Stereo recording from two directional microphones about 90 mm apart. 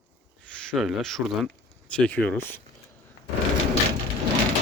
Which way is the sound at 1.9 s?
15° left (ahead or behind).